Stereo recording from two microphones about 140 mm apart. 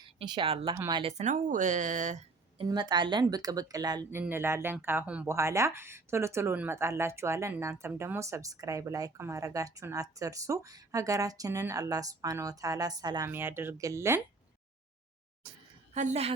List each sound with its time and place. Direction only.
0.0 s speech: 35° right (ahead or behind)
1.1 s speech: 60° right (ahead or behind)
2.6 s speech: 30° right (ahead or behind)
4.1 s speech: 15° right (ahead or behind)
5.3 s speech: 20° right (ahead or behind)
13.3 s speech: 15° right (ahead or behind)
16.0 s a woman's voice: 50° right (ahead or behind)